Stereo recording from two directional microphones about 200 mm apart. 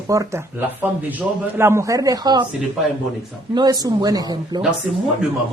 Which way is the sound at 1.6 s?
15° right (ahead or behind).